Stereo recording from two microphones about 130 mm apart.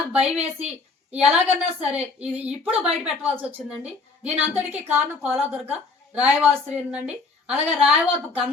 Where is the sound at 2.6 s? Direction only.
50° right (ahead or behind).